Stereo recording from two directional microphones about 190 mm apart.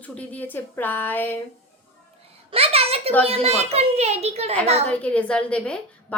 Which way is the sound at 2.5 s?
30° right (ahead or behind).